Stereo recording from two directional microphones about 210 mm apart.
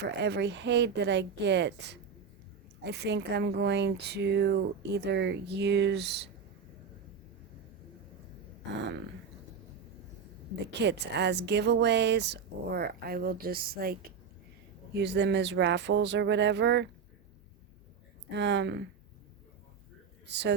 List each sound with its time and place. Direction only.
0.0 s speech: 55° right (ahead or behind)
8.7 s speech: 60° right (ahead or behind)
10.7 s speech: 55° right (ahead or behind)
18.3 s speech: 55° right (ahead or behind)
20.2 s speech: 55° right (ahead or behind)